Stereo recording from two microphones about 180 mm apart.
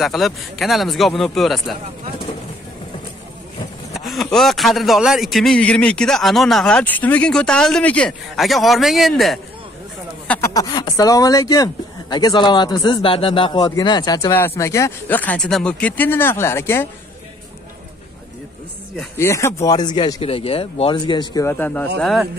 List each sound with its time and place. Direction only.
0.0 s a man's voice: centre (ahead or behind)
3.9 s a man's voice: centre (ahead or behind)
10.2 s a sound: 5° left (ahead or behind)
10.5 s speech: 20° left (ahead or behind)
19.1 s speech: 15° left (ahead or behind)
21.5 s speech: 10° left (ahead or behind)